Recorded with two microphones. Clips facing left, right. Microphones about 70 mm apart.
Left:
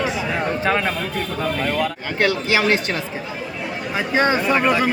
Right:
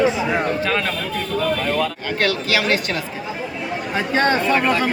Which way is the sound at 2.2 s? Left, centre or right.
Left.